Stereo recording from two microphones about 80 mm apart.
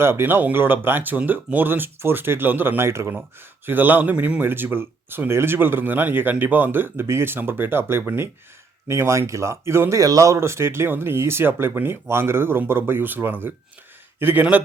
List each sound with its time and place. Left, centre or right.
0.0 s speech: right
10.0 s speech: right